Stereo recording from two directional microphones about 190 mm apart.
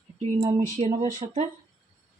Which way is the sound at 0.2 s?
25° right (ahead or behind).